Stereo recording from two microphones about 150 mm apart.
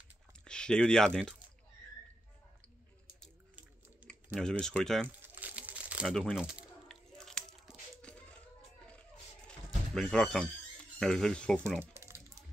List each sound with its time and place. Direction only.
0.5 s speech: 5° left (ahead or behind)
4.0 s typing: 10° right (ahead or behind)
4.4 s speech: 5° left (ahead or behind)
5.0 s crumpling: 10° right (ahead or behind)
6.1 s speech: 5° left (ahead or behind)
6.9 s biting: 5° left (ahead or behind)
8.0 s a sound: 10° left (ahead or behind)
9.5 s a sound: 5° left (ahead or behind)
11.0 s speech: 5° left (ahead or behind)
11.8 s a sound: 20° right (ahead or behind)